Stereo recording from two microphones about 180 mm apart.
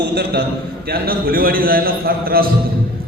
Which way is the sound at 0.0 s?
65° right (ahead or behind).